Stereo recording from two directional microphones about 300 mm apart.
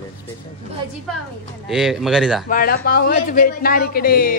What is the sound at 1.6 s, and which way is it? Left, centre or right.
Speech, centre.